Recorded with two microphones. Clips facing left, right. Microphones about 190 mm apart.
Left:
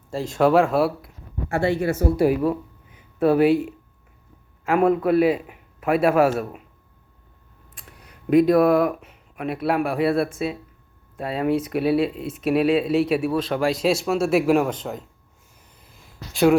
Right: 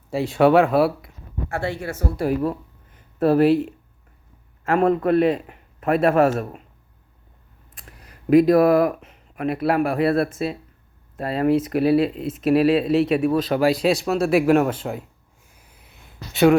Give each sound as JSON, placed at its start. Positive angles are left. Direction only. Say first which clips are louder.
{"t": 0.1, "sound": "speech", "louder": "right 2 dB", "side_deg": -5}
{"t": 1.5, "sound": "speech", "louder": "left 6 dB", "side_deg": 10}
{"t": 7.9, "sound": "speech", "louder": "right 3 dB", "side_deg": 0}
{"t": 15.5, "sound": "a sound", "louder": "even", "side_deg": -10}